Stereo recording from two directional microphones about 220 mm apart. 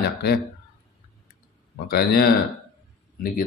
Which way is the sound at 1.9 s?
45° left (ahead or behind).